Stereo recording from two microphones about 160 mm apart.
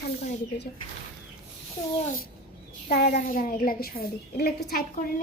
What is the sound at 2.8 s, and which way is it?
A child's voice, 80° left.